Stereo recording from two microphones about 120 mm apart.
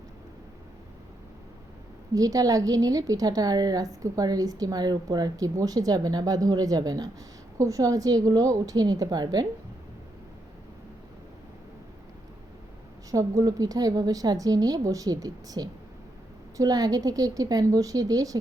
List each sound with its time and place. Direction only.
2.1 s a woman's voice: 30° right (ahead or behind)
13.1 s a woman's voice: 30° right (ahead or behind)